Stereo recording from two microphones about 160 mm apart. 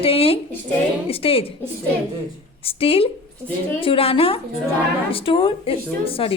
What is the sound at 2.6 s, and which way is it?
A woman's voice, 35° left (ahead or behind).